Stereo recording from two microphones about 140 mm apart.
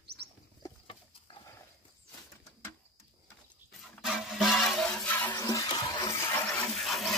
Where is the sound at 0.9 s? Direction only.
40° left (ahead or behind).